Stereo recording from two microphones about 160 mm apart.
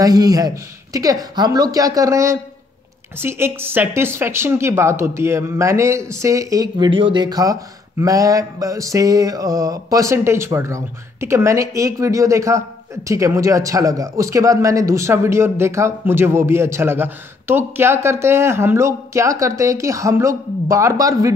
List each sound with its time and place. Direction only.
0.0 s mantra: 25° right (ahead or behind)
3.2 s speech: 15° right (ahead or behind)
8.0 s mantra: 20° right (ahead or behind)